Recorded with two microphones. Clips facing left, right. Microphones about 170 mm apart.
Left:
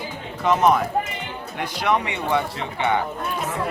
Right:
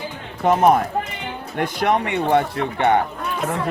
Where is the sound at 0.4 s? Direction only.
50° right (ahead or behind).